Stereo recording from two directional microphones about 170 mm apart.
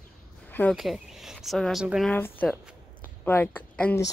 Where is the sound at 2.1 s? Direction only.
10° left (ahead or behind).